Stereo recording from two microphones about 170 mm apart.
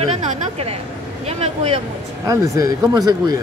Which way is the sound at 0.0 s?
35° right (ahead or behind).